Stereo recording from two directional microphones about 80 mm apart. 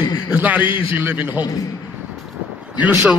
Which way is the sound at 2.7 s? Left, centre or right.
Centre.